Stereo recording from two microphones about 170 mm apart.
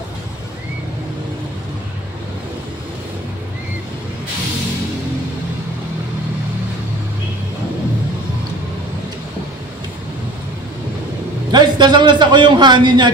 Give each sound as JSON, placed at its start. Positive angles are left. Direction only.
{"t": 11.5, "sound": "a man's voice", "side_deg": -25}